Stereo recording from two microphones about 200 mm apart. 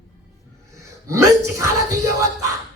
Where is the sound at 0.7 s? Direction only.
15° right (ahead or behind).